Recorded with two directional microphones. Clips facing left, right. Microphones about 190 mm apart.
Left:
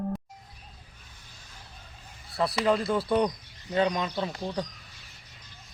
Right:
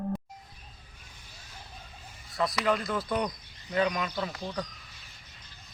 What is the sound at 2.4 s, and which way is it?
Speech, 30° left (ahead or behind).